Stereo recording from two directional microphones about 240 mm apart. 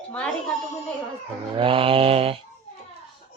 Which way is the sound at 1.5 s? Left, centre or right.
Right.